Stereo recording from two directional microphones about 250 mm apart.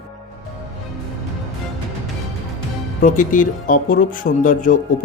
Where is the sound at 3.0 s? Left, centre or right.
Left.